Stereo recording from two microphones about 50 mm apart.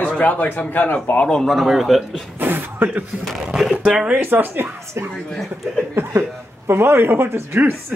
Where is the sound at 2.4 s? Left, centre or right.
Right.